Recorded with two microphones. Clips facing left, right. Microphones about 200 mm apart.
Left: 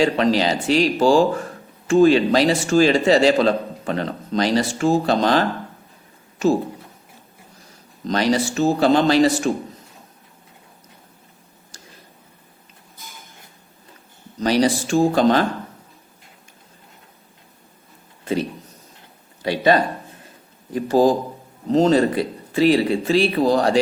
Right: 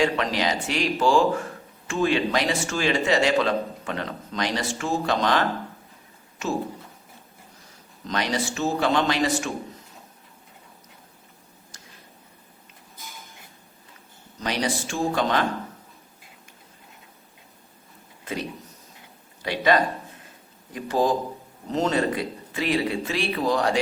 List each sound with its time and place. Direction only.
0.0 s speech: 30° left (ahead or behind)
8.0 s speech: 35° left (ahead or behind)
11.7 s a sound: 35° left (ahead or behind)
14.4 s speech: 35° left (ahead or behind)
19.4 s speech: 30° left (ahead or behind)